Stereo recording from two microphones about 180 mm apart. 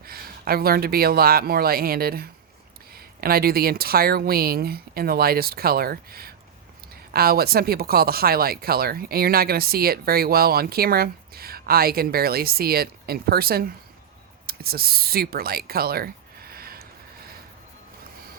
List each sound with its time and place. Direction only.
0.0 s speech: 55° right (ahead or behind)